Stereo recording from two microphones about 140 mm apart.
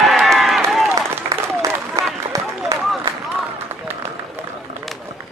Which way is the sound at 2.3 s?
25° right (ahead or behind).